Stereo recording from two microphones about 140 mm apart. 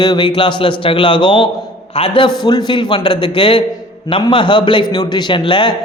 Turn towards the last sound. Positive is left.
turn(degrees=35)  # may be behind; listen again after turning